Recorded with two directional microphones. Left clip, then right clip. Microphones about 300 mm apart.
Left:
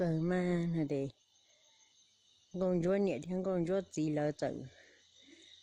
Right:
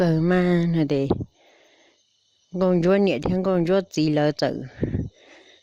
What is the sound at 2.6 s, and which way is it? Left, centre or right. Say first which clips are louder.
Speech: right 13 dB; right.